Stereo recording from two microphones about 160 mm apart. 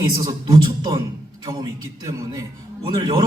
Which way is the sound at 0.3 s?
25° right (ahead or behind).